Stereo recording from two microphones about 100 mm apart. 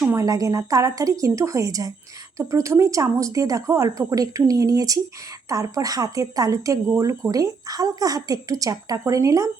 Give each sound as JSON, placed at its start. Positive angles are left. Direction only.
{"t": 0.2, "sound": "a woman's voice", "side_deg": -35}